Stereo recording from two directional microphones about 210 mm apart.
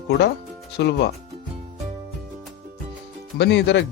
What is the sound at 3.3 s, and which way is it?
Speech, 55° left (ahead or behind).